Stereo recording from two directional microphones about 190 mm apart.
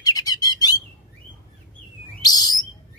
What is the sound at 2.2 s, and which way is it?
Bird, 20° left (ahead or behind).